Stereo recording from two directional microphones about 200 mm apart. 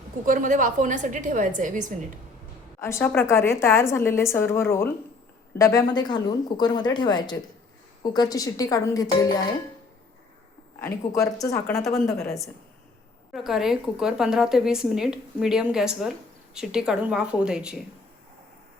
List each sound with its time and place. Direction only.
0.3 s a woman's voice: 40° right (ahead or behind)
2.8 s a woman's voice: 10° left (ahead or behind)
10.8 s a woman's voice: 15° left (ahead or behind)
13.3 s speech: centre (ahead or behind)